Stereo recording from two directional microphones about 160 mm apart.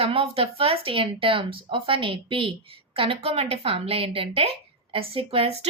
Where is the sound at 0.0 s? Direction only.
35° right (ahead or behind).